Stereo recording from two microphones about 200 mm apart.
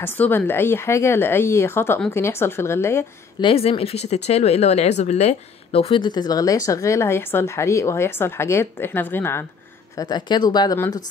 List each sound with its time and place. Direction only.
0.0 s speech: 10° left (ahead or behind)
3.4 s speech: 30° left (ahead or behind)